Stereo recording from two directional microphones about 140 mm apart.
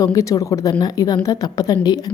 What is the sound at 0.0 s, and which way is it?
A woman's voice, 25° left (ahead or behind).